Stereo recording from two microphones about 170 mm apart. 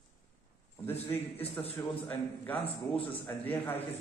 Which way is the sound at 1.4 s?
35° left (ahead or behind).